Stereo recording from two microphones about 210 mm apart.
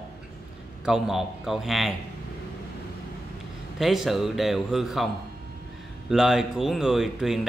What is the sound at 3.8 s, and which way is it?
Speech, centre (ahead or behind).